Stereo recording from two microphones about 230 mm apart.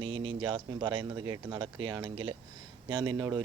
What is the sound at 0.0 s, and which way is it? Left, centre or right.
Speech, right.